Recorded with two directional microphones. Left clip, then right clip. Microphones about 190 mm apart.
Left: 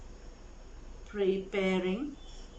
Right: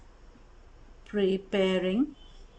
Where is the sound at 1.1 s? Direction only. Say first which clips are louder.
Right 3 dB; 60° right (ahead or behind).